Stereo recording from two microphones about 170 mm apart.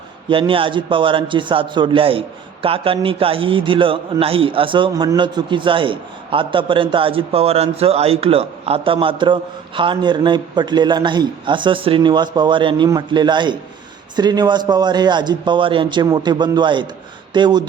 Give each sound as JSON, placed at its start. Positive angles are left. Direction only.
{"t": 0.3, "sound": "a man's voice", "side_deg": -30}